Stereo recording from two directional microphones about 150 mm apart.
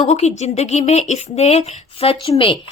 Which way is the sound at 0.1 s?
45° left (ahead or behind).